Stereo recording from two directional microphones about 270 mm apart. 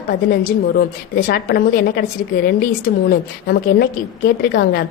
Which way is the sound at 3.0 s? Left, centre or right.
Left.